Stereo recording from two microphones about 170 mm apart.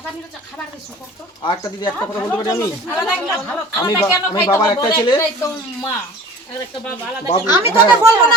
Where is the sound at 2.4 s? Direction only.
20° left (ahead or behind).